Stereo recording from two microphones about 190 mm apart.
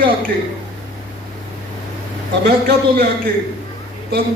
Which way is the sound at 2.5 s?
55° right (ahead or behind).